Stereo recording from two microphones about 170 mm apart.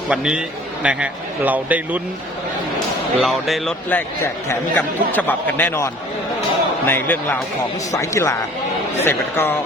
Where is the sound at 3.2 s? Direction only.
Centre (ahead or behind).